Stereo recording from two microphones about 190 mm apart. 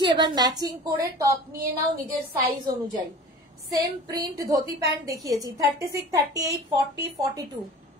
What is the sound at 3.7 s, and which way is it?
A woman's voice, 20° right (ahead or behind).